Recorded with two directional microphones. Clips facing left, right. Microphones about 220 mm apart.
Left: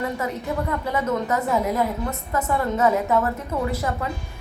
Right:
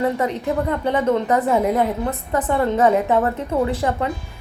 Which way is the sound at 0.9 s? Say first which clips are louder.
Right 6 dB; 30° right (ahead or behind).